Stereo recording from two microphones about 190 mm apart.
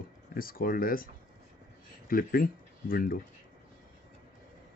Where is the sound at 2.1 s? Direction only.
50° left (ahead or behind).